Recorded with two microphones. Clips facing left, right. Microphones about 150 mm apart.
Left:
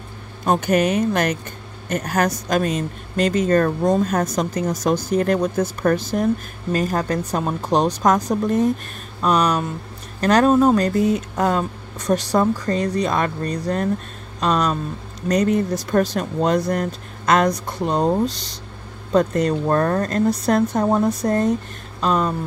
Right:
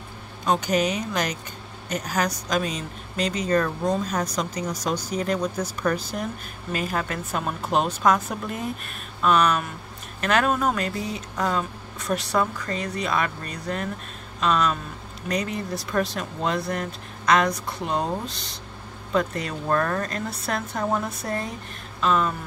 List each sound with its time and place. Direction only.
0.5 s speech: 55° left (ahead or behind); by 10.9 s 30° left (ahead or behind)
10.9 s speech: 50° left (ahead or behind)
12.1 s speech: 35° left (ahead or behind)